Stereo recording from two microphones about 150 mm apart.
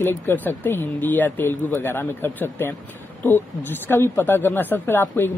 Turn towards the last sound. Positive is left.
turn(degrees=15)  # may be behind; listen again after turning